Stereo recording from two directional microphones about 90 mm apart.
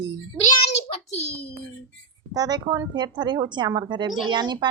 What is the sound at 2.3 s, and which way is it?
Speech, 45° right (ahead or behind).